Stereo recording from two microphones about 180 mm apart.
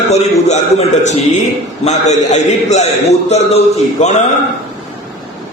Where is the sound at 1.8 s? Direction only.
40° left (ahead or behind).